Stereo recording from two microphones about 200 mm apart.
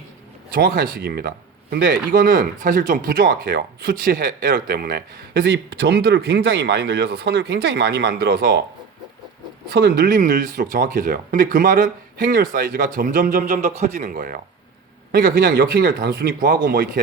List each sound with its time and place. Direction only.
0.5 s speech: 45° right (ahead or behind)
9.6 s speech: 55° right (ahead or behind)